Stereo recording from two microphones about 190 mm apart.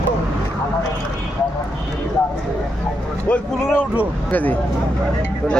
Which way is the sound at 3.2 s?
10° left (ahead or behind).